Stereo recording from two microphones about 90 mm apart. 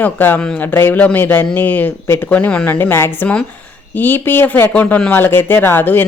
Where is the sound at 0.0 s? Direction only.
20° left (ahead or behind).